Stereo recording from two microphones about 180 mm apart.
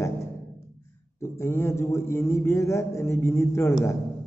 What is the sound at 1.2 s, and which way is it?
A man's voice, 15° left (ahead or behind).